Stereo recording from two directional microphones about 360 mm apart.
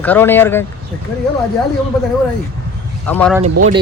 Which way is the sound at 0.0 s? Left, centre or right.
Centre.